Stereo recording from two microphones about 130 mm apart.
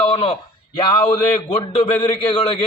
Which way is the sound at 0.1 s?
45° left (ahead or behind).